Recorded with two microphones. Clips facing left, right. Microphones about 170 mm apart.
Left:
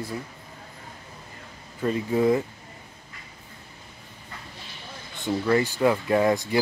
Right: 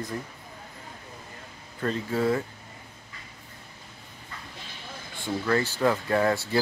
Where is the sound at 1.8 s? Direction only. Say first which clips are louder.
Left 4 dB; 15° left (ahead or behind).